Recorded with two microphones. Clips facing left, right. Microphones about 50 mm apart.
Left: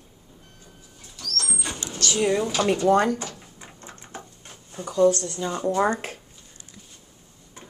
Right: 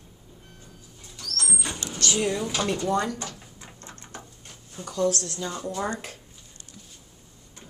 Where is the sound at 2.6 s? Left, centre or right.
Centre.